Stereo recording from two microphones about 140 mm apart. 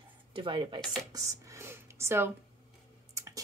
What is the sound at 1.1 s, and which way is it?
Speech, 20° right (ahead or behind).